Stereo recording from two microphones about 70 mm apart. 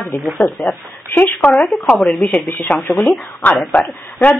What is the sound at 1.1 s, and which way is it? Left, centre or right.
Speech, left.